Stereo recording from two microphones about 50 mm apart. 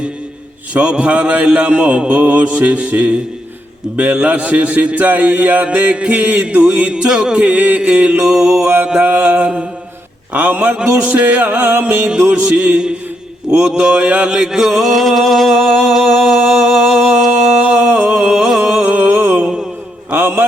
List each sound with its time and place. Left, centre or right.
0.7 s a man's voice: right
7.4 s a man's voice: right
8.6 s music: right
9.0 s a man's voice: right
10.8 s music: right
12.2 s a man's voice: right
13.5 s mantra: centre
15.8 s a sound: centre
17.7 s a sound: right
18.1 s a sound: centre
18.8 s a sound: right
19.4 s mantra: centre
20.1 s mantra: right